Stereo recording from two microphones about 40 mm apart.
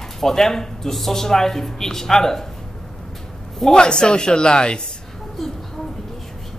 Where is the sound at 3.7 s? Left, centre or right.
Left.